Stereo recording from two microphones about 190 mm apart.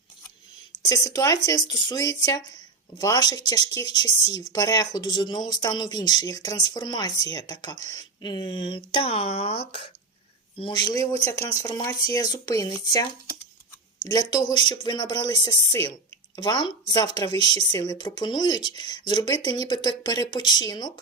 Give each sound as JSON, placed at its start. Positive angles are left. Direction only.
{"t": 0.9, "sound": "speech", "side_deg": 20}
{"t": 10.6, "sound": "speech", "side_deg": 25}